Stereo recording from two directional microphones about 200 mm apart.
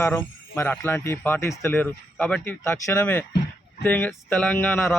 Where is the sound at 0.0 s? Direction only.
15° left (ahead or behind).